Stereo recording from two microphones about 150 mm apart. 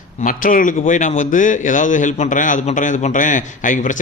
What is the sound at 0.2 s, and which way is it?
A man's voice, 60° left (ahead or behind).